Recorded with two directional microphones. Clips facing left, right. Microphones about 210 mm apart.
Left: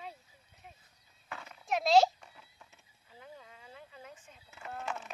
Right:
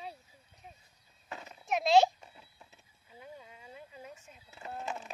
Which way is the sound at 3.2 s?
15° right (ahead or behind).